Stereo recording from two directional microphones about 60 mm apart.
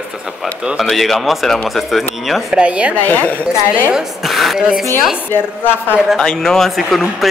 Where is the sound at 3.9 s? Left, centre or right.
Centre.